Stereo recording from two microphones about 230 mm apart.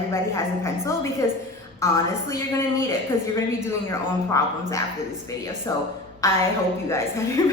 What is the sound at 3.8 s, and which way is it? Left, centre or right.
A woman's voice, centre.